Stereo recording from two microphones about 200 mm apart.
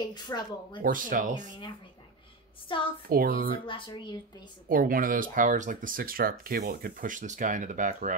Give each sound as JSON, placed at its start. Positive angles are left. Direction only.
{"t": 0.1, "sound": "speech", "side_deg": 20}
{"t": 0.8, "sound": "speech", "side_deg": -45}
{"t": 2.7, "sound": "speech", "side_deg": 25}
{"t": 3.1, "sound": "speech", "side_deg": -50}
{"t": 3.6, "sound": "speech", "side_deg": 25}
{"t": 4.6, "sound": "speech", "side_deg": -45}